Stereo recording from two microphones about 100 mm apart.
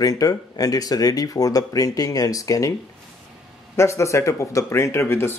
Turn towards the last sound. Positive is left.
turn(degrees=25)  # may be behind; listen again after turning